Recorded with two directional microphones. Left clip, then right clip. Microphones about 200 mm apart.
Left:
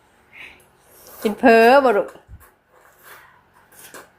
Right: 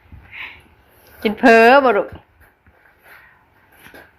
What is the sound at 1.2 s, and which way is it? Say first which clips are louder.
Speech: right 2 dB; 10° left (ahead or behind).